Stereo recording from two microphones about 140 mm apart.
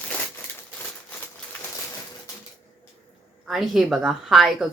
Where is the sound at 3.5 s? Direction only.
Centre (ahead or behind).